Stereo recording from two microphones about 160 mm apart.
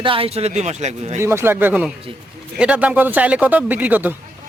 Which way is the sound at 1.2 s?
15° right (ahead or behind).